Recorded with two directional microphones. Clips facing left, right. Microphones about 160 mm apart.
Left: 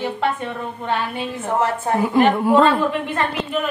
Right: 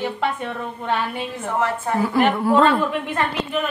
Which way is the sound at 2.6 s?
Centre (ahead or behind).